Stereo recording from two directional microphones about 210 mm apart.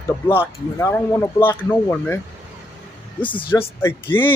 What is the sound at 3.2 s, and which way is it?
Speech, 25° left (ahead or behind).